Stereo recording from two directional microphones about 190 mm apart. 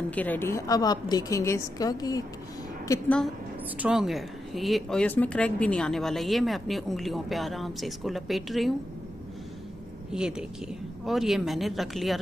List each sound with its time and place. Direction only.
0.1 s a woman's voice: 10° left (ahead or behind)
3.7 s speech: 5° right (ahead or behind)
10.1 s speech: 5° right (ahead or behind)